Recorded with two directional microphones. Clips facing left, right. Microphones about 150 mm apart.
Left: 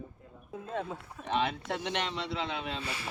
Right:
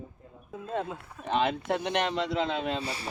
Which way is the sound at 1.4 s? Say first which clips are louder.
Right 5 dB; 50° right (ahead or behind).